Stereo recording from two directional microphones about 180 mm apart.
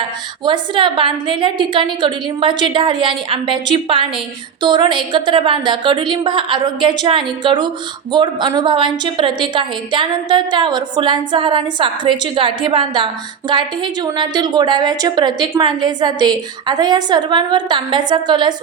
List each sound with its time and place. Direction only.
0.4 s a woman's voice: 25° right (ahead or behind)